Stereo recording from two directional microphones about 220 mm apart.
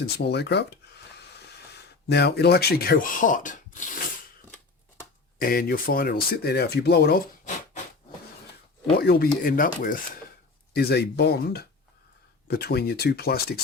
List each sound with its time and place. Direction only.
0.0 s a sound: 45° left (ahead or behind)
2.0 s speech: 50° left (ahead or behind)
5.4 s speech: 40° left (ahead or behind)
9.0 s speech: 45° left (ahead or behind)